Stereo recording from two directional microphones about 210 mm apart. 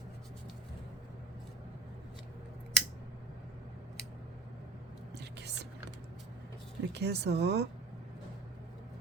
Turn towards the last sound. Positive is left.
turn(degrees=-50)  # may be behind; listen again after turning